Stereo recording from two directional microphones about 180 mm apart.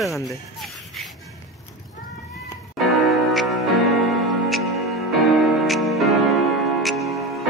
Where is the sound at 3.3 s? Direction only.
Centre (ahead or behind).